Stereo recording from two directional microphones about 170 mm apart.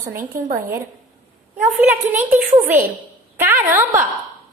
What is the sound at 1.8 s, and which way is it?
A woman's voice, 10° right (ahead or behind).